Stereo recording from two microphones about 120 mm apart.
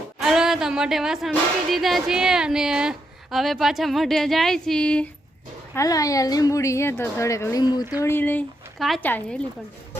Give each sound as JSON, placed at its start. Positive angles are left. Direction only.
{"t": 0.2, "sound": "a woman's voice", "side_deg": -5}
{"t": 5.7, "sound": "a woman's voice", "side_deg": 30}
{"t": 7.6, "sound": "speech", "side_deg": 35}
{"t": 8.0, "sound": "speech", "side_deg": 15}